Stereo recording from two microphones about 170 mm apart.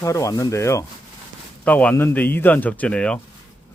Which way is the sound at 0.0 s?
20° left (ahead or behind).